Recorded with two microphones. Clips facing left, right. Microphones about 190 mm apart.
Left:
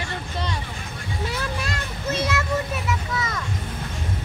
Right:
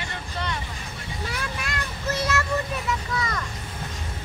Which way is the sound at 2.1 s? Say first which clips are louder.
Left 1 dB; 15° left (ahead or behind).